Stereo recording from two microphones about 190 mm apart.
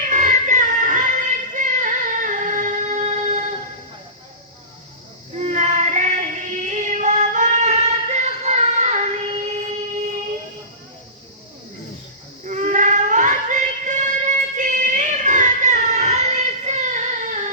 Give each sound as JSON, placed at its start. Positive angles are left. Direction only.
{"t": 0.1, "sound": "music", "side_deg": -40}
{"t": 5.4, "sound": "child singing", "side_deg": -40}
{"t": 12.5, "sound": "child singing", "side_deg": -40}